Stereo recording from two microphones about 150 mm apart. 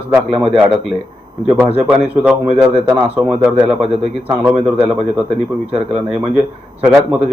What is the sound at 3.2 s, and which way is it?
A man's voice, 10° right (ahead or behind).